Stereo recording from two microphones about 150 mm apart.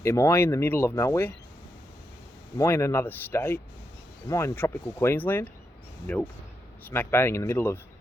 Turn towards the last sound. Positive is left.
turn(degrees=20)  # may be behind; listen again after turning